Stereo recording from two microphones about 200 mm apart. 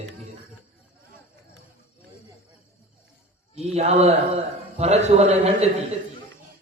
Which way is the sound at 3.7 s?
35° right (ahead or behind).